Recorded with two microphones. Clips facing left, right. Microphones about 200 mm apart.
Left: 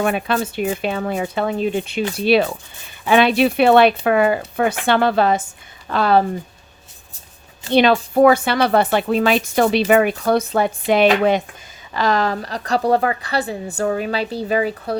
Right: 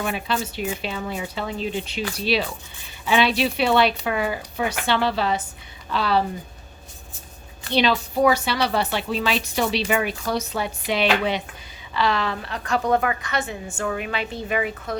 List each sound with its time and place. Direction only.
0.0 s speech: 55° left (ahead or behind)
7.7 s a woman's voice: 55° left (ahead or behind); by 14.9 s 35° left (ahead or behind)